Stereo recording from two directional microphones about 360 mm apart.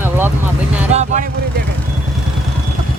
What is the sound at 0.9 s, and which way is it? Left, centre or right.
Speech, centre.